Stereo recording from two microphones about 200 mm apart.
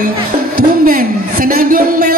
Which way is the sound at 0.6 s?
45° right (ahead or behind).